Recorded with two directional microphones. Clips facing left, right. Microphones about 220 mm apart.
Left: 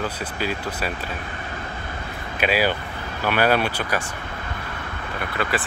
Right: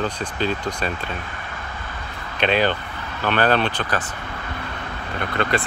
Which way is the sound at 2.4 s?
5° left (ahead or behind).